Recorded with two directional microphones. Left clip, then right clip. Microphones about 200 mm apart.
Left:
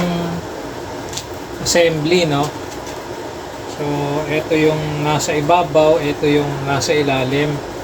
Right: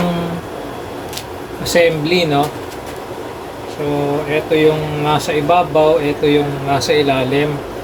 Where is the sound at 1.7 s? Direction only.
Centre (ahead or behind).